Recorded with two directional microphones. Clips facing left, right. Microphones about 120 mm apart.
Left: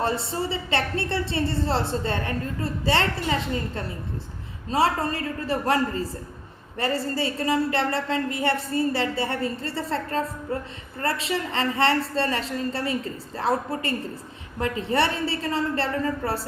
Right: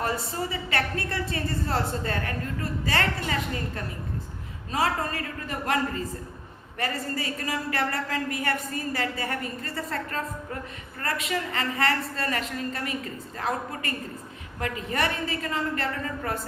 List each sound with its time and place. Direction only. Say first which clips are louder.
0.0 s a woman's voice: left 3 dB; 30° left (ahead or behind)